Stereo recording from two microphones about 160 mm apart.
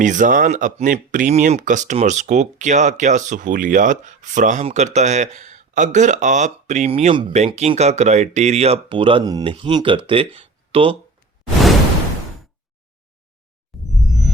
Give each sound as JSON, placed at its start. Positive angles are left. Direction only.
{"t": 0.0, "sound": "speech", "side_deg": -55}
{"t": 13.7, "sound": "music", "side_deg": 0}